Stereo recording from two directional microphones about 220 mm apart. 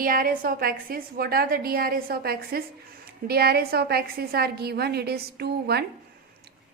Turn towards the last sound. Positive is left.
turn(degrees=-45)  # may be behind; listen again after turning